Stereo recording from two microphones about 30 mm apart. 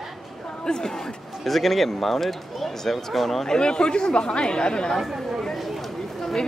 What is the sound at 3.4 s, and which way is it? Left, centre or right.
Speech, left.